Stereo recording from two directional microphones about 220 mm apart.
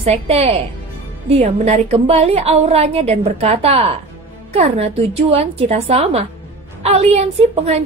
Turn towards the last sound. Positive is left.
turn(degrees=-30)  # may be behind; listen again after turning